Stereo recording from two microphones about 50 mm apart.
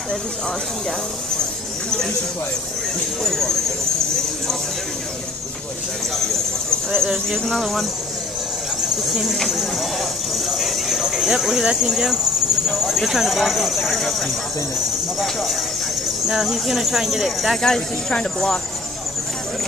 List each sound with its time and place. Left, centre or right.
3.3 s speech: centre
6.1 s a sound: centre
7.1 s speech: centre
8.8 s speech: centre
17.6 s speech: centre